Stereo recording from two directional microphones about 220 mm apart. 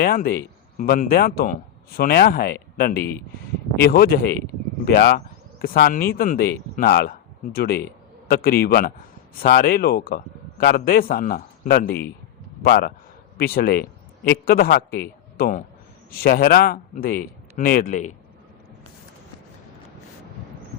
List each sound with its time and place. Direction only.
0.0 s a man's voice: 40° left (ahead or behind)